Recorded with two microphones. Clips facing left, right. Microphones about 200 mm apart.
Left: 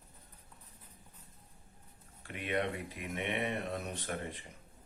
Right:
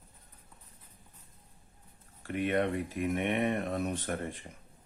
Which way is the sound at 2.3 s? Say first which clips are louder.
Right 6 dB; 45° right (ahead or behind).